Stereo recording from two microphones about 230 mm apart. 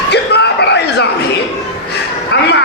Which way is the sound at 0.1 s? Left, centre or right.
Left.